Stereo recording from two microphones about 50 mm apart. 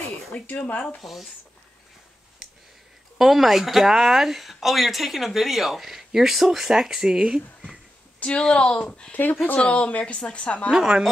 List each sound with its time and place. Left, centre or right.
0.5 s a woman's voice: left
3.2 s speech: centre
8.2 s a woman's voice: centre
9.1 s speech: left
9.6 s a woman's voice: left
10.7 s speech: centre